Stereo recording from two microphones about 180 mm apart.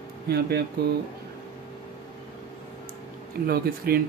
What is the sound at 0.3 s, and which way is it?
Speech, 65° right (ahead or behind).